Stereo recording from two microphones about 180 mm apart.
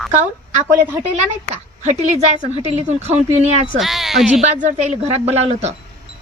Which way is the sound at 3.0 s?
35° right (ahead or behind).